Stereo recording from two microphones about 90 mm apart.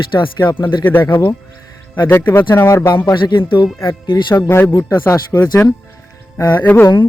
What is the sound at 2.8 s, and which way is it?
Speech, 55° left (ahead or behind).